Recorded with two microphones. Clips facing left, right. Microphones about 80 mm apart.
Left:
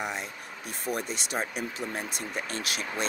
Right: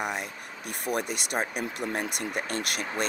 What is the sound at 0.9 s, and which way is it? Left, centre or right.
Speech, right.